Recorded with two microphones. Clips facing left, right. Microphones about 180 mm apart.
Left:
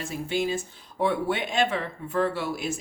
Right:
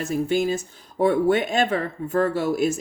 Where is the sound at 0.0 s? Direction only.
45° right (ahead or behind).